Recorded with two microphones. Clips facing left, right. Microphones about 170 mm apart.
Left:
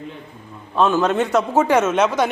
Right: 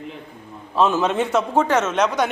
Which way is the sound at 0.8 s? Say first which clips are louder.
Left 2 dB; centre (ahead or behind).